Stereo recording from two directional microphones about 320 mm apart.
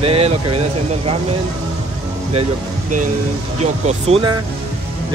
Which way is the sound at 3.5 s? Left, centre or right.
Centre.